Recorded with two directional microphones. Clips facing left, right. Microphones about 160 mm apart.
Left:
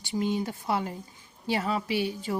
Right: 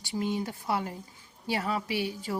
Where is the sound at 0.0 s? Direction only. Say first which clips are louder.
Left 2 dB; 25° left (ahead or behind).